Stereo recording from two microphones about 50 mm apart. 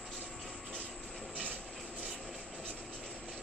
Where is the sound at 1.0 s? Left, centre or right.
Centre.